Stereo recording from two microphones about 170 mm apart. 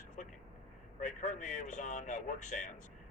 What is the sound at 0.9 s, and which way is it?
A man's voice, 45° left (ahead or behind).